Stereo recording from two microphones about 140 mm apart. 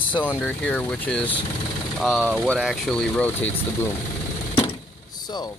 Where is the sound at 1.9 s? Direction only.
Centre (ahead or behind).